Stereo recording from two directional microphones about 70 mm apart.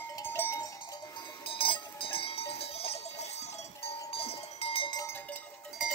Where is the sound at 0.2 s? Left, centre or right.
Left.